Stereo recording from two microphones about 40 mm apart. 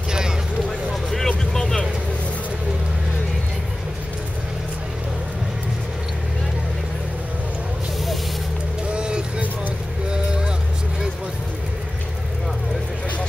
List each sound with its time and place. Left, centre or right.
0.7 s vehicle: centre
8.9 s vehicle: right
10.0 s a sound: right